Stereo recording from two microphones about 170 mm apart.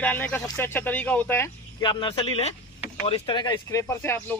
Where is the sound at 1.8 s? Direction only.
25° left (ahead or behind); by 4.3 s 10° left (ahead or behind).